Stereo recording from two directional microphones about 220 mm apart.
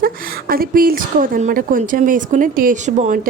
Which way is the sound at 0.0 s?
40° right (ahead or behind).